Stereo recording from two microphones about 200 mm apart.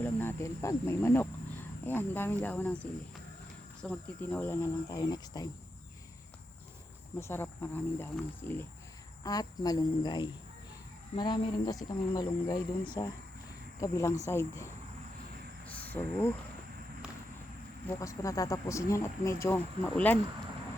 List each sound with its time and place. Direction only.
0.0 s speech: 10° left (ahead or behind)
7.2 s speech: 10° left (ahead or behind)
15.6 s a sound: 5° left (ahead or behind)
17.8 s speech: 15° left (ahead or behind)